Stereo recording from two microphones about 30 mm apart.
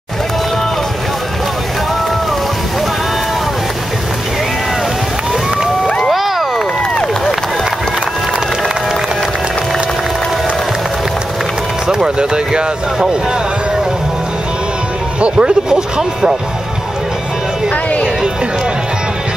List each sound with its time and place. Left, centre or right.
6.1 s a sound: centre
11.9 s speech: right
15.3 s speech: right
16.0 s speech: centre